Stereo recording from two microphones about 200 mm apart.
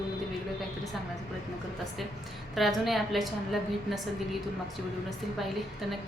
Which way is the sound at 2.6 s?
Centre (ahead or behind).